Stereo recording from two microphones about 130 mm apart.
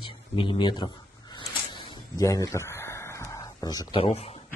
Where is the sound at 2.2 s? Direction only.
25° left (ahead or behind).